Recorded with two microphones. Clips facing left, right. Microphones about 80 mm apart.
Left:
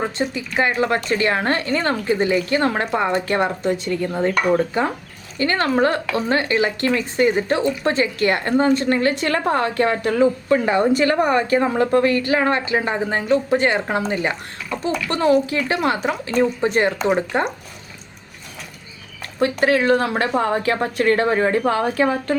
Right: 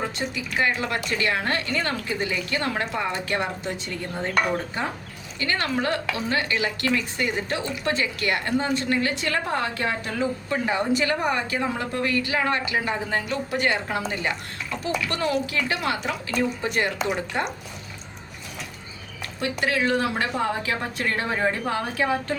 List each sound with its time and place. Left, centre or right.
0.2 s a woman's voice: left
5.4 s a woman's voice: left
17.1 s a woman's voice: left
19.4 s a woman's voice: left